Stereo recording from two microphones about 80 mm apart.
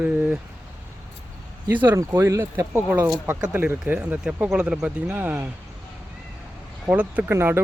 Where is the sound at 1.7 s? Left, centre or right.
Right.